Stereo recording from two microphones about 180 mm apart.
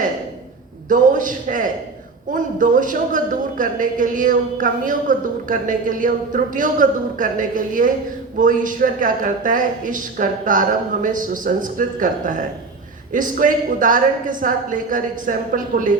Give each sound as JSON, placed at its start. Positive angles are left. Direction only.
{"t": 0.9, "sound": "a man's voice", "side_deg": -45}